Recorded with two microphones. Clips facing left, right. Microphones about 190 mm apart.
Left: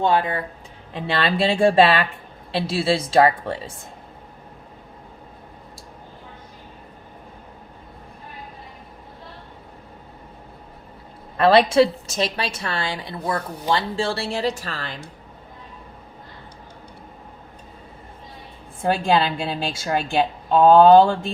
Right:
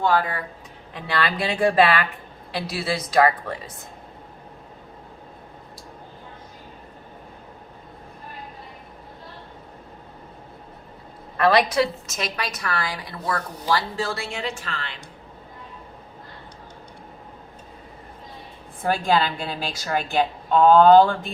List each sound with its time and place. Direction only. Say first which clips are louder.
0.0 s a woman's voice: left 2 dB; 20° left (ahead or behind)
11.3 s a woman's voice: left 4 dB; 30° left (ahead or behind)
18.8 s a woman's voice: left 2 dB; 25° left (ahead or behind)